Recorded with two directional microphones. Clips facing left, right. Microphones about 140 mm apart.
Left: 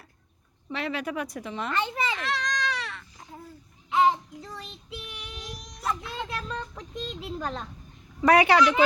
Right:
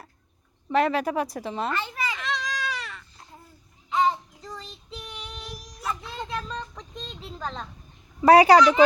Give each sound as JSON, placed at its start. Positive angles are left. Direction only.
{"t": 0.7, "sound": "a woman's voice", "side_deg": -45}
{"t": 1.7, "sound": "a child's voice", "side_deg": 20}
{"t": 2.1, "sound": "baby cry", "side_deg": 0}
{"t": 3.8, "sound": "babbling", "side_deg": 5}
{"t": 4.5, "sound": "child singing", "side_deg": 5}
{"t": 5.5, "sound": "a sound", "side_deg": -5}
{"t": 8.2, "sound": "a woman's voice", "side_deg": -35}